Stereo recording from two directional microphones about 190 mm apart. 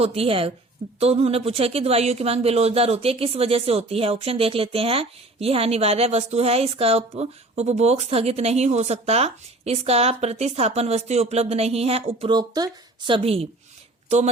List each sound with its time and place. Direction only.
0.0 s speech: 30° right (ahead or behind)